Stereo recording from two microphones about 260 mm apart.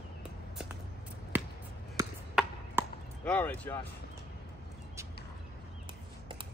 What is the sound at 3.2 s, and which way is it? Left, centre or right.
Speech, centre.